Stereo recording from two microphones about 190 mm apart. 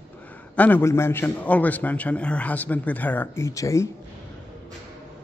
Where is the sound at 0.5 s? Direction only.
10° left (ahead or behind).